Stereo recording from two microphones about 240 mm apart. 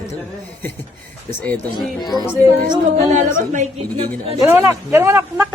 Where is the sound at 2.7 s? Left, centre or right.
Right.